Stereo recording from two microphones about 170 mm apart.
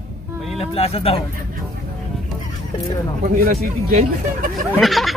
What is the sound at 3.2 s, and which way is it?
Speech, 55° right (ahead or behind).